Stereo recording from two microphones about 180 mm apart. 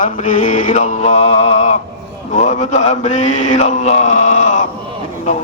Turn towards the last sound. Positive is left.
turn(degrees=40)  # may be behind; listen again after turning